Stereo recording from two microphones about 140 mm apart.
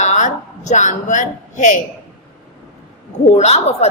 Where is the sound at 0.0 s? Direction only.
60° left (ahead or behind).